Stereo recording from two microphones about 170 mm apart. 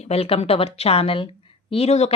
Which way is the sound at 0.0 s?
35° left (ahead or behind).